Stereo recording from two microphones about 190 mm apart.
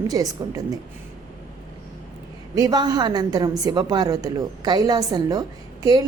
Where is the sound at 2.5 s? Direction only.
20° right (ahead or behind).